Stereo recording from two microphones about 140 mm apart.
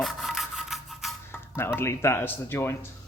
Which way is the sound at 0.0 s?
Centre (ahead or behind).